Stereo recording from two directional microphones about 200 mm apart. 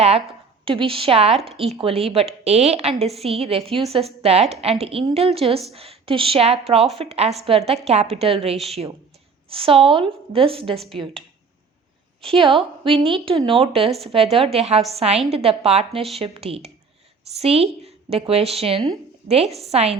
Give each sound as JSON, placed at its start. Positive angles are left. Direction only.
{"t": 0.6, "sound": "a woman's voice", "side_deg": -25}
{"t": 10.8, "sound": "speech", "side_deg": 0}
{"t": 12.2, "sound": "a woman's voice", "side_deg": -25}